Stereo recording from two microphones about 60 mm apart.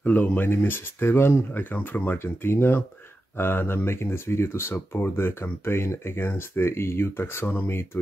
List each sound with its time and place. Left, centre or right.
0.0 s speech: left